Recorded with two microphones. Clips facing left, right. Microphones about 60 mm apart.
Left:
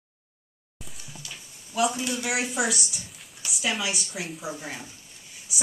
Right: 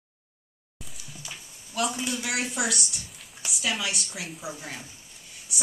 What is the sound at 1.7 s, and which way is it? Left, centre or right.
A woman's voice, centre.